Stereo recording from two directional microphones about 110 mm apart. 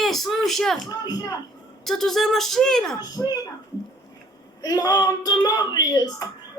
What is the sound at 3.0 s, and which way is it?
Speech, 35° left (ahead or behind).